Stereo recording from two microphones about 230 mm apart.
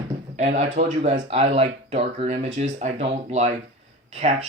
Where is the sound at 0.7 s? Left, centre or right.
Right.